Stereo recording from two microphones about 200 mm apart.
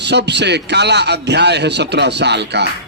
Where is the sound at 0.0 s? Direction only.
55° right (ahead or behind).